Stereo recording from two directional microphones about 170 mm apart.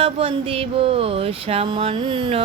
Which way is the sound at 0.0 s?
35° right (ahead or behind).